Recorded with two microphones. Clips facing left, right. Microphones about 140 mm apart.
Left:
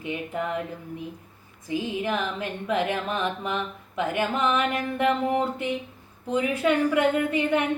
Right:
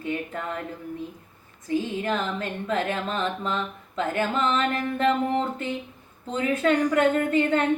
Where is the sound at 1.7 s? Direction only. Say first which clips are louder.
Right 1 dB; 10° left (ahead or behind).